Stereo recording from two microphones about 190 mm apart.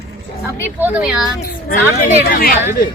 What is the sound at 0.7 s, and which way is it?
Speech, 10° right (ahead or behind).